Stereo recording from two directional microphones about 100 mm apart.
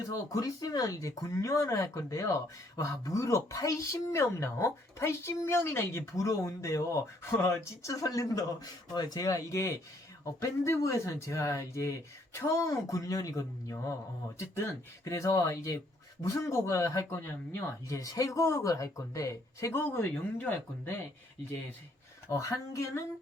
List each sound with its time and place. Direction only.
0.1 s speech: 35° left (ahead or behind)
22.3 s speech: 30° left (ahead or behind)